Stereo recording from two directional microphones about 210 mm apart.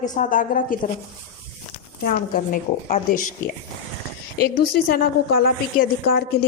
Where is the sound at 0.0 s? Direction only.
35° left (ahead or behind).